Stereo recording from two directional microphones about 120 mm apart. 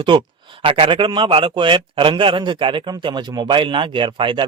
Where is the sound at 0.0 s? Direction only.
45° right (ahead or behind).